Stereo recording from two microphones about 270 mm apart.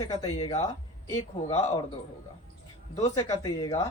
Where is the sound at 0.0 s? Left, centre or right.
Centre.